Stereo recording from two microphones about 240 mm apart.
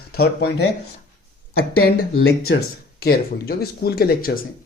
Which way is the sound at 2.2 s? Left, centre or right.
Left.